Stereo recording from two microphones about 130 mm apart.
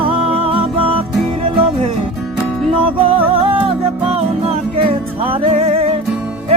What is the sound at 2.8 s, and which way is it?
Music, 45° right (ahead or behind).